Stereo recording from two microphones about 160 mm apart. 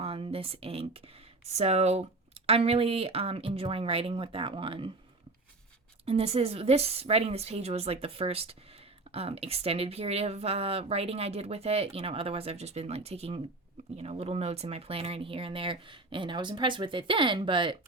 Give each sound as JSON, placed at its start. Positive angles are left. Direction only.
{"t": 0.0, "sound": "speech", "side_deg": -35}
{"t": 6.1, "sound": "speech", "side_deg": -40}